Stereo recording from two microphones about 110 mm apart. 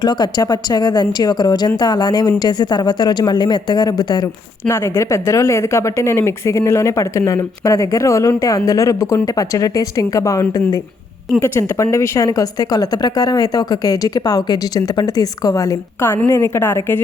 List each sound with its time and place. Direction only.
0.0 s a woman's voice: 40° left (ahead or behind); by 17.0 s 20° left (ahead or behind)